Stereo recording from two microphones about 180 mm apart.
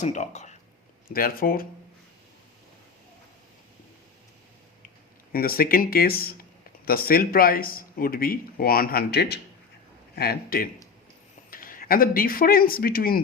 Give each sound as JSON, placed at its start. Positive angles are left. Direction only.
{"t": 0.0, "sound": "speech", "side_deg": 40}
{"t": 1.1, "sound": "speech", "side_deg": 55}
{"t": 5.3, "sound": "speech", "side_deg": 55}